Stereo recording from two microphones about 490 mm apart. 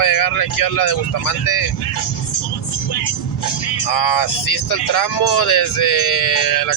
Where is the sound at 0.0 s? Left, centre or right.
Left.